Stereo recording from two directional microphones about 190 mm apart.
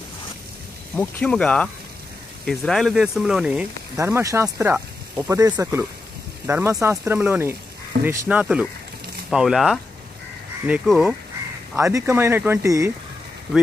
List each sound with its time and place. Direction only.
0.9 s speech: 5° left (ahead or behind)
3.9 s speech: 15° right (ahead or behind)
11.7 s speech: 15° right (ahead or behind)